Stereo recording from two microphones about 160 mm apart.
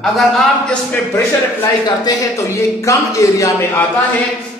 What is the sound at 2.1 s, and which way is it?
Speech, 25° left (ahead or behind).